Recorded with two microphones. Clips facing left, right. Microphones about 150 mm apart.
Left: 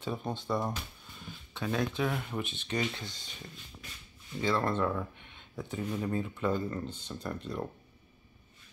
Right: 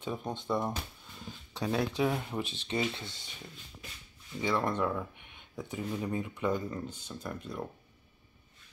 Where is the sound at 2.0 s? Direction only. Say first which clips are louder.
Right 2 dB; 20° right (ahead or behind).